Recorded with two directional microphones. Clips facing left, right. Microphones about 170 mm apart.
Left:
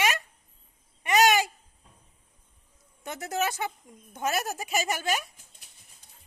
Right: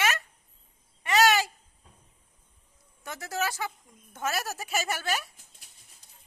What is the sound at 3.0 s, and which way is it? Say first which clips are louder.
A woman's voice: left 2 dB; 20° left (ahead or behind).